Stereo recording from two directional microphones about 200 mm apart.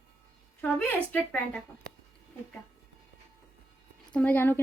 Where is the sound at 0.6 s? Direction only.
5° left (ahead or behind).